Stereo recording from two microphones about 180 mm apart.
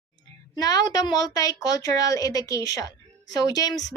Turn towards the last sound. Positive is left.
turn(degrees=20)  # may be behind; listen again after turning